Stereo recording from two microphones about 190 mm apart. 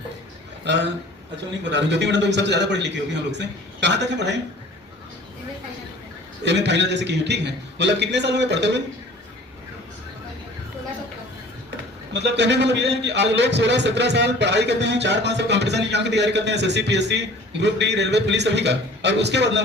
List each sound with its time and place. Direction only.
0.6 s a man's voice: 65° right (ahead or behind)
6.4 s a man's voice: 65° right (ahead or behind)
12.2 s a man's voice: 65° right (ahead or behind)